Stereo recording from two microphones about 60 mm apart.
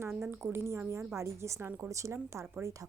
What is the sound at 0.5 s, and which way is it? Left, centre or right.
A woman's voice, right.